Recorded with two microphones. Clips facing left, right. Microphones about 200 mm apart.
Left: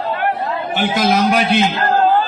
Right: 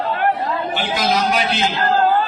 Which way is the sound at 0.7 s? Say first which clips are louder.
Left 6 dB; 50° left (ahead or behind).